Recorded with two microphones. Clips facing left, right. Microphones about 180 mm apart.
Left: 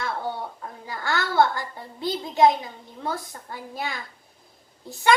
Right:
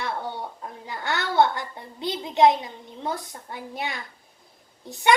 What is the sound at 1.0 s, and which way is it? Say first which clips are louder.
A child's voice: even; 20° right (ahead or behind).